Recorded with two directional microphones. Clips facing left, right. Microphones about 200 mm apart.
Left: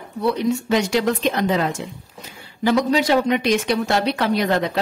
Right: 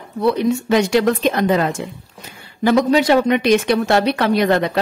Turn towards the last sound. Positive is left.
turn(degrees=-65)  # may be behind; listen again after turning